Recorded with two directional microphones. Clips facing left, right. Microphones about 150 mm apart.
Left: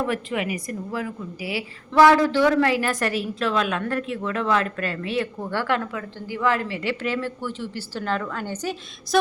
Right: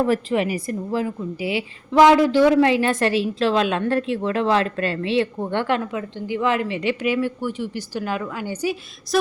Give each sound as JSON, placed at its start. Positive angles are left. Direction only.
{"t": 0.0, "sound": "a woman's voice", "side_deg": -35}